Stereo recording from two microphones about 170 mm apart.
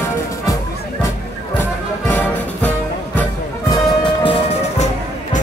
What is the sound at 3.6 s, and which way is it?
Music, 25° left (ahead or behind).